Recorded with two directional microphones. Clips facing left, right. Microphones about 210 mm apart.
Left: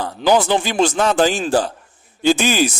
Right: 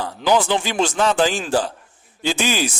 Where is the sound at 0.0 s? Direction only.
40° left (ahead or behind).